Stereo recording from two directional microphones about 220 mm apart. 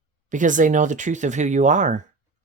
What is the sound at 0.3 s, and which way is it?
Speech, 35° right (ahead or behind).